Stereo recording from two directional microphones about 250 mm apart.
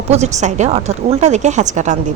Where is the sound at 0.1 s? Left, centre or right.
Right.